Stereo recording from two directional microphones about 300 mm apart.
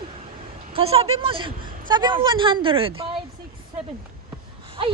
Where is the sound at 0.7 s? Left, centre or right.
Centre.